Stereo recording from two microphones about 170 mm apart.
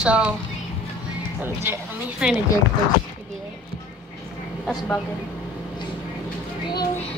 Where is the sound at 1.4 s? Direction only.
15° right (ahead or behind).